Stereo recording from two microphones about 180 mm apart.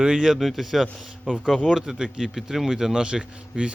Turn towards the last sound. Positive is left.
turn(degrees=-5)  # may be behind; listen again after turning